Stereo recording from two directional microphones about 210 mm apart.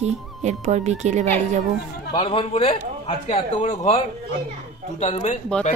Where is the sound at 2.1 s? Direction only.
25° left (ahead or behind).